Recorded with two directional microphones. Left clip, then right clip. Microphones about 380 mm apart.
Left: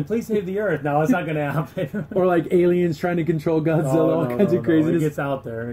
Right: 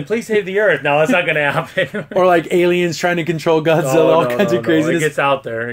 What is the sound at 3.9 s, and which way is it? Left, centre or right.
Speech, right.